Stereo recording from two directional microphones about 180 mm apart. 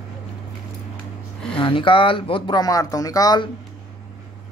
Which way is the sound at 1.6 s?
30° left (ahead or behind).